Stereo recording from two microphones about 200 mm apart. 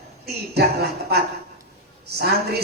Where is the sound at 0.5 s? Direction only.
55° right (ahead or behind).